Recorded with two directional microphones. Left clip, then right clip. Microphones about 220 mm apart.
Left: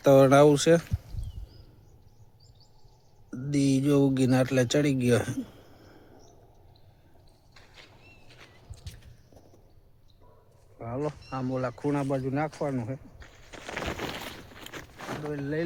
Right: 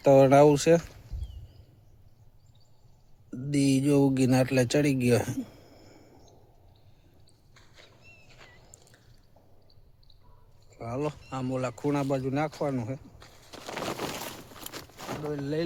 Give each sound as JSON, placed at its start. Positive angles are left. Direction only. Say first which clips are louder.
{"t": 0.0, "sound": "speech", "louder": "even", "side_deg": 5}
{"t": 3.2, "sound": "speech", "louder": "even", "side_deg": 0}
{"t": 10.8, "sound": "speech", "louder": "even", "side_deg": -10}
{"t": 11.8, "sound": "speech", "louder": "right 2 dB", "side_deg": -15}
{"t": 13.2, "sound": "a sound", "louder": "even", "side_deg": -25}
{"t": 15.2, "sound": "speech", "louder": "right 1 dB", "side_deg": -10}